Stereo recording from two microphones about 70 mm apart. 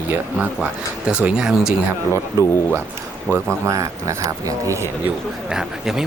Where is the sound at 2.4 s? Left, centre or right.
Right.